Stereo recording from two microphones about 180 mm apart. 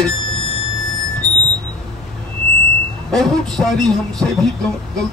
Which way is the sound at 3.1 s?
Centre (ahead or behind).